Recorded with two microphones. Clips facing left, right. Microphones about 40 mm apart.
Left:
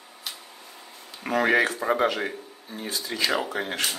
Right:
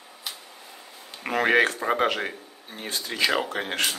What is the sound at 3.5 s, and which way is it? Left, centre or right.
Speech, right.